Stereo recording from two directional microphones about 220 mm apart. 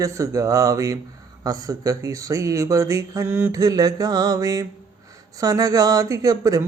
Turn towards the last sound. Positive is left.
turn(degrees=-15)  # may be behind; listen again after turning